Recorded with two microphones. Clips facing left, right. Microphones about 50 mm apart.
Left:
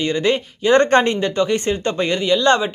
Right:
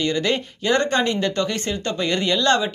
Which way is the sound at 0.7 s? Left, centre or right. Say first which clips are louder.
Left 6 dB; left.